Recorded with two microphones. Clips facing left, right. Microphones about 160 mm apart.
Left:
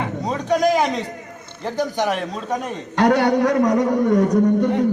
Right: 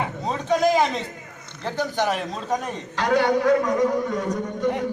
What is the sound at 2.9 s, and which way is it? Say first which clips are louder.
A man's voice: left 4 dB; 60° left (ahead or behind).